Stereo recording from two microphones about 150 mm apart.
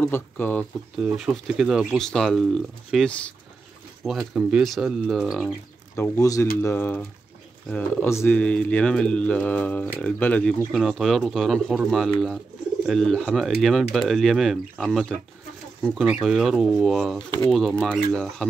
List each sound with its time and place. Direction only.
0.0 s speech: 10° left (ahead or behind)
0.9 s speech: 5° right (ahead or behind)
5.9 s speech: 20° left (ahead or behind)
10.7 s speech: centre (ahead or behind)